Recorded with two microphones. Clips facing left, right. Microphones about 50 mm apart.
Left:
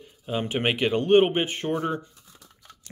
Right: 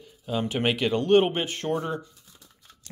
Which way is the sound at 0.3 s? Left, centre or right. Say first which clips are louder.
Even; left.